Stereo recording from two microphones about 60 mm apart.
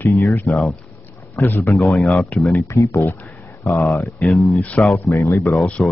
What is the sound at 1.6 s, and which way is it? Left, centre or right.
Speech, left.